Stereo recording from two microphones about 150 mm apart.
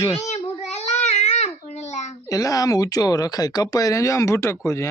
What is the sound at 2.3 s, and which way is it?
Speech, 25° left (ahead or behind).